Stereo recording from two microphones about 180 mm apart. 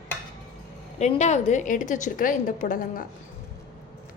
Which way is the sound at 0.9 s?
40° left (ahead or behind).